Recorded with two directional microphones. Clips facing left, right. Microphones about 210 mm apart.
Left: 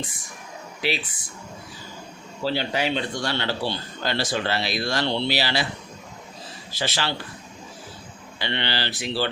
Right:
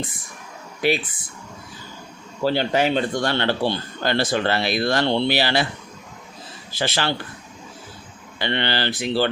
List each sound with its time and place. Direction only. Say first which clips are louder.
0.8 s speech: right 6 dB; 50° right (ahead or behind)
2.4 s speech: right 5 dB; 50° right (ahead or behind)
6.7 s speech: right 4 dB; 50° right (ahead or behind)
8.4 s speech: right 5 dB; 55° right (ahead or behind)